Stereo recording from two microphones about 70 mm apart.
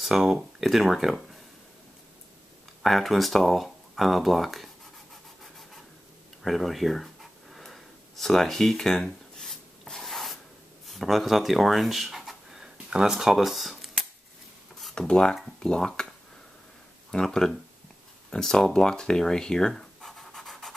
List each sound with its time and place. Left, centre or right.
0.0 s speech: centre
2.8 s speech: centre
5.4 s a sound: centre
10.9 s speech: centre
15.0 s speech: centre
17.1 s speech: centre